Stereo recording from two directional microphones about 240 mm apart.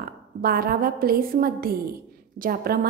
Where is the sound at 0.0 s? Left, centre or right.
Right.